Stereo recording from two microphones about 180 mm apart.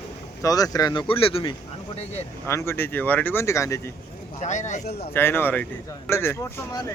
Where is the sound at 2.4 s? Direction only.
15° left (ahead or behind).